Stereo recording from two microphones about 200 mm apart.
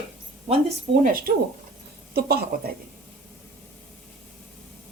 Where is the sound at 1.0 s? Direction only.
45° right (ahead or behind).